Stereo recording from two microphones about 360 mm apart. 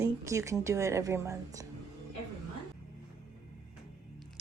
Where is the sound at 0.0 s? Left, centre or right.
Centre.